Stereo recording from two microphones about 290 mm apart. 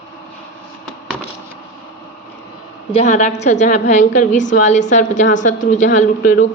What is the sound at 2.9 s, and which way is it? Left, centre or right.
Speech, left.